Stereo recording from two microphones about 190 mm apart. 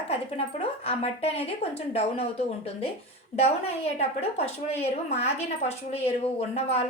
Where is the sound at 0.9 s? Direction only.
30° left (ahead or behind).